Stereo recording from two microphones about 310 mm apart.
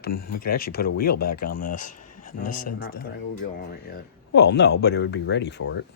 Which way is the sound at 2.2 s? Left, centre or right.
Left.